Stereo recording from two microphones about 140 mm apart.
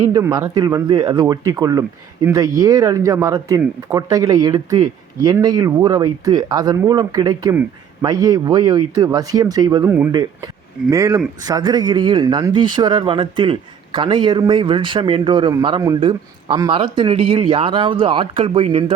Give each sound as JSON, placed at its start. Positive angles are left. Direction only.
{"t": 0.0, "sound": "speech", "side_deg": -25}
{"t": 9.8, "sound": "speech", "side_deg": -15}
{"t": 10.1, "sound": "speech", "side_deg": -30}